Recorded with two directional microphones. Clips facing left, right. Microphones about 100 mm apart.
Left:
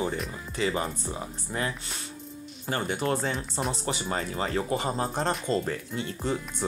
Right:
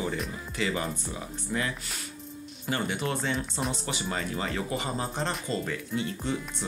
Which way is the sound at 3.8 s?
35° left (ahead or behind).